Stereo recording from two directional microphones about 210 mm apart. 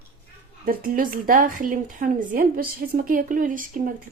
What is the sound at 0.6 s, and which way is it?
Speech, 40° right (ahead or behind).